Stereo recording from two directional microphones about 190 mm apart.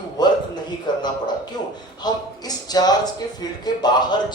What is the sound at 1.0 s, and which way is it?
Speech, 20° left (ahead or behind).